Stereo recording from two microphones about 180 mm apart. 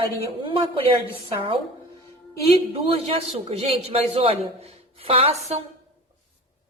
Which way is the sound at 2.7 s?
35° right (ahead or behind).